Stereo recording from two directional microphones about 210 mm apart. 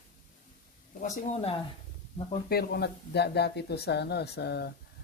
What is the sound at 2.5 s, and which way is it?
Speech, 50° left (ahead or behind).